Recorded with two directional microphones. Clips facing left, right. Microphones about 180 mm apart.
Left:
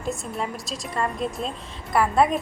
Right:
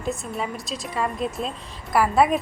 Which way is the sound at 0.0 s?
Centre (ahead or behind).